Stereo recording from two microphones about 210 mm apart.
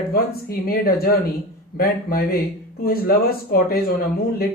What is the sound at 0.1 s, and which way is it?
Speech, 45° left (ahead or behind).